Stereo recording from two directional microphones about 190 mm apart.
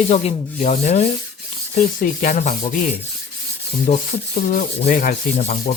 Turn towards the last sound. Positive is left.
turn(degrees=40)  # may be behind; listen again after turning